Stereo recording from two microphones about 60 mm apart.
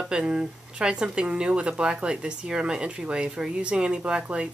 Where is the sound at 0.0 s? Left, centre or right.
Centre.